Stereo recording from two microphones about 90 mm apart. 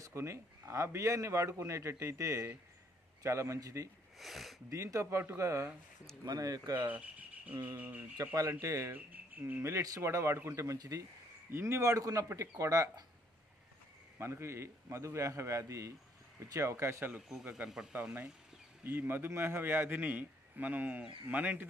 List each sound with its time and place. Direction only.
0.0 s speech: 30° right (ahead or behind)
4.2 s speech: centre (ahead or behind)
4.6 s speech: 35° right (ahead or behind)
6.2 s speech: 45° right (ahead or behind)
6.9 s speech: 15° right (ahead or behind)
8.4 s speech: 35° right (ahead or behind)
8.9 s speech: 20° right (ahead or behind); by 13.0 s 40° right (ahead or behind)
14.1 s speech: 30° right (ahead or behind)
17.3 s a man's voice: 10° right (ahead or behind)